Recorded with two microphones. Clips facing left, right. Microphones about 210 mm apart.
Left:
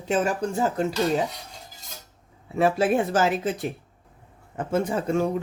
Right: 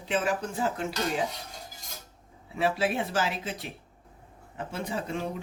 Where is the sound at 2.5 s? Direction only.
50° left (ahead or behind).